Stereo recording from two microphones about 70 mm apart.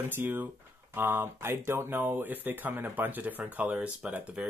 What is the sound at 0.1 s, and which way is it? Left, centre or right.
Speech, right.